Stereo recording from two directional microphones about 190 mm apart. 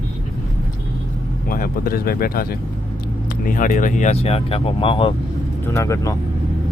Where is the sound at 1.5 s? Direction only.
50° left (ahead or behind); by 5.1 s 30° left (ahead or behind).